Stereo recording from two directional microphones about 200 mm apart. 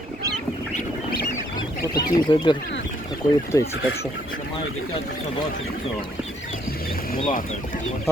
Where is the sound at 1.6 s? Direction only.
20° left (ahead or behind).